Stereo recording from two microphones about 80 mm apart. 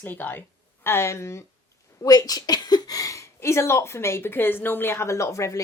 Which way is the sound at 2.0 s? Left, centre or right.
Left.